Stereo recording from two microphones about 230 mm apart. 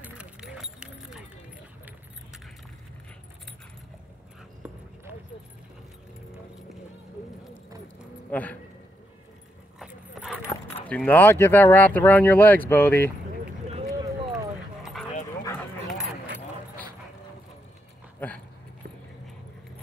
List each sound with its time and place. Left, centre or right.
0.0 s keys jangling: centre
4.6 s clip-clop: centre
8.3 s a man's voice: centre
9.8 s clip-clop: centre
10.4 s dog: centre
10.9 s speech: centre
14.0 s clip-clop: centre
14.8 s dog: centre